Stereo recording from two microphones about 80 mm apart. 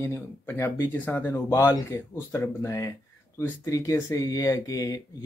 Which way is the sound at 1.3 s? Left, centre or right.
Left.